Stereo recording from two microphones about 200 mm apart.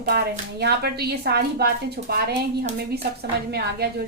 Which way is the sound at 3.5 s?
50° right (ahead or behind).